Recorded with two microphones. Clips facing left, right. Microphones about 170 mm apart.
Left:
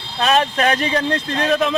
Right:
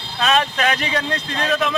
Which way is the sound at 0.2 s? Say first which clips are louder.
Left 2 dB; 35° left (ahead or behind).